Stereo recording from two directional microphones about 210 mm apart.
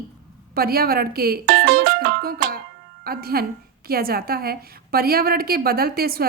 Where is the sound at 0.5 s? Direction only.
45° right (ahead or behind).